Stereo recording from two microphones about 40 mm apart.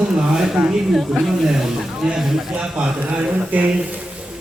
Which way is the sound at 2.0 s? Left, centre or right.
Right.